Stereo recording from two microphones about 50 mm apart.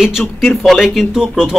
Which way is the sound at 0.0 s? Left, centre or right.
Centre.